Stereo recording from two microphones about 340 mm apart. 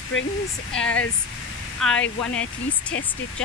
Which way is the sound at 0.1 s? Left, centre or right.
Left.